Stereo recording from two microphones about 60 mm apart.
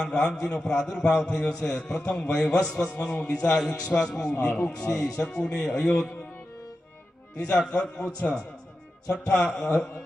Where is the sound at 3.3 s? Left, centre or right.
Left.